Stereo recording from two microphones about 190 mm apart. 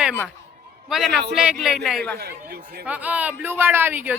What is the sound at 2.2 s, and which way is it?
Speech, 55° right (ahead or behind).